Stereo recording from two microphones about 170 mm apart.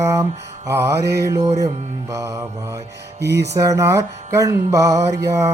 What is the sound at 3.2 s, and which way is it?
Music, 85° right.